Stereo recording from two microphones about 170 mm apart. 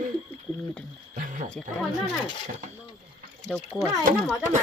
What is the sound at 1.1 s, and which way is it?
Speech, 50° right (ahead or behind).